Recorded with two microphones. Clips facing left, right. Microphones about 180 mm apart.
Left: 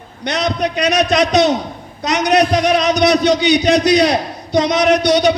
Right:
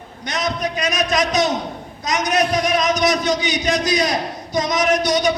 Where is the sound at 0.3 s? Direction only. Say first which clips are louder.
Left 5 dB; 70° left (ahead or behind).